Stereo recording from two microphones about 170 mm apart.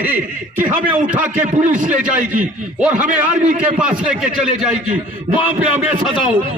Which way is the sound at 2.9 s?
50° right (ahead or behind).